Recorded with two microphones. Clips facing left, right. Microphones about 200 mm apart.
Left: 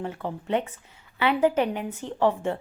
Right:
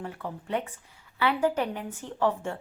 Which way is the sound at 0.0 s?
25° left (ahead or behind).